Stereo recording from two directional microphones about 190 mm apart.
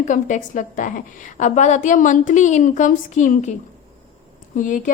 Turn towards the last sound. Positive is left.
turn(degrees=45)  # may be behind; listen again after turning